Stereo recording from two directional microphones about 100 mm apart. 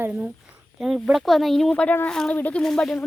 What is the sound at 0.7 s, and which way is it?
Speech, 5° right (ahead or behind).